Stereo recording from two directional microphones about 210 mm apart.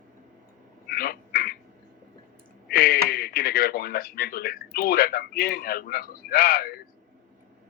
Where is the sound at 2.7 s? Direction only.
45° left (ahead or behind).